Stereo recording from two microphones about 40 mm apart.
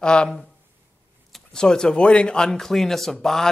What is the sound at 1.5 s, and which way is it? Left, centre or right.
Speech, centre.